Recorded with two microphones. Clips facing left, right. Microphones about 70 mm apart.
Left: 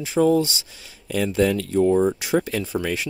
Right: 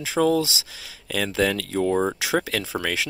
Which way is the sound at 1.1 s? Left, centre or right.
Right.